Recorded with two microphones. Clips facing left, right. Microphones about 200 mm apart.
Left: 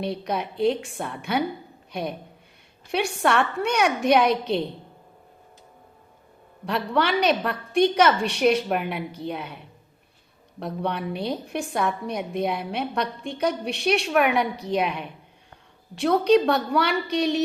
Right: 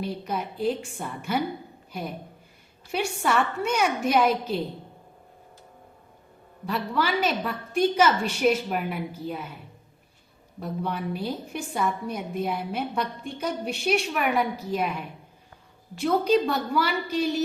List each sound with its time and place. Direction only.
0.0 s a woman's voice: 70° left (ahead or behind)
6.7 s a woman's voice: 70° left (ahead or behind)
10.6 s a woman's voice: 70° left (ahead or behind)
16.2 s a woman's voice: 75° left (ahead or behind)